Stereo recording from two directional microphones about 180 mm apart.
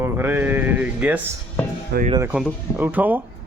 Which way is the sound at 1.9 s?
65° right (ahead or behind).